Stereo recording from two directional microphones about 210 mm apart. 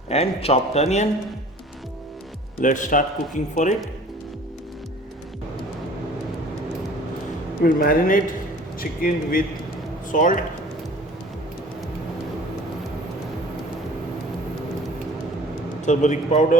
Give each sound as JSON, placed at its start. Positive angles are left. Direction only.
{"t": 0.1, "sound": "a man's voice", "side_deg": 30}
{"t": 2.6, "sound": "speech", "side_deg": 35}
{"t": 7.6, "sound": "a man's voice", "side_deg": 45}
{"t": 15.9, "sound": "speech", "side_deg": 35}